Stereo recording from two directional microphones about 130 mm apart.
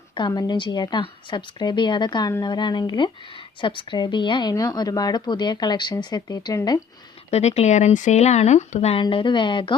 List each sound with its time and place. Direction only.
0.1 s a woman's voice: 35° left (ahead or behind)
7.3 s speech: 55° left (ahead or behind); by 9.7 s 40° left (ahead or behind)